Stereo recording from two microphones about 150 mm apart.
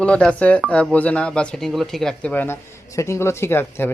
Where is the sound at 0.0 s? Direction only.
5° left (ahead or behind).